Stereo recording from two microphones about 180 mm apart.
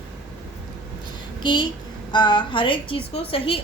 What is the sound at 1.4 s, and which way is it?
A woman's voice, 25° left (ahead or behind).